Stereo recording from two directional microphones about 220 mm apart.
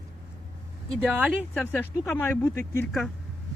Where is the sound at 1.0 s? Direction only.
5° right (ahead or behind).